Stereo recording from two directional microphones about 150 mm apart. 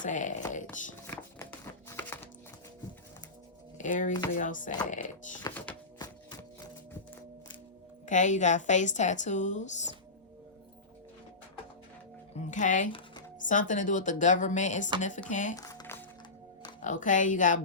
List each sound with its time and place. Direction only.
0.0 s speech: 55° left (ahead or behind)
1.0 s music: 15° left (ahead or behind)
3.8 s speech: 55° left (ahead or behind)
6.0 s a sound: 25° left (ahead or behind)
8.0 s a woman's voice: 55° left (ahead or behind)
12.4 s speech: 55° left (ahead or behind)
15.5 s music: 20° left (ahead or behind)
16.8 s speech: 60° left (ahead or behind)